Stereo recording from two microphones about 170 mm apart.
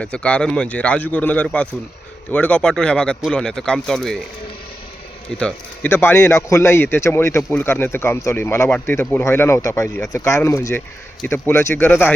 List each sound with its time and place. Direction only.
0.0 s speech: 5° left (ahead or behind)
5.4 s speech: 10° left (ahead or behind)